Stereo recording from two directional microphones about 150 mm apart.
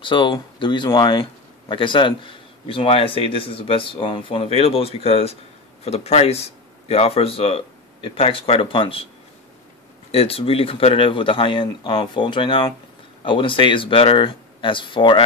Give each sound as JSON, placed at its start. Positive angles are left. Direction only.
{"t": 0.0, "sound": "a man's voice", "side_deg": 35}
{"t": 10.1, "sound": "a man's voice", "side_deg": 40}